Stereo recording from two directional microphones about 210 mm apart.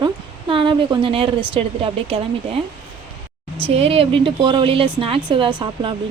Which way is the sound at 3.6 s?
25° right (ahead or behind).